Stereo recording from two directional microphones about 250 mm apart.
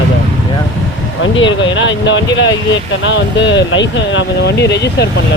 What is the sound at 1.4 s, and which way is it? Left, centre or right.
Speech, left.